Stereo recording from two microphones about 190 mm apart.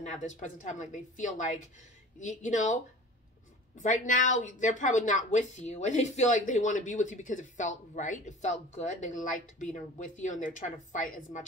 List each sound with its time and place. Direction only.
0.0 s a woman's voice: 40° left (ahead or behind)